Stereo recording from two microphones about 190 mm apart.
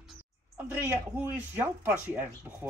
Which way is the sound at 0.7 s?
10° right (ahead or behind).